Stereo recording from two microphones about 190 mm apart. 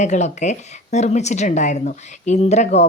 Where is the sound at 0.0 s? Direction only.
40° left (ahead or behind).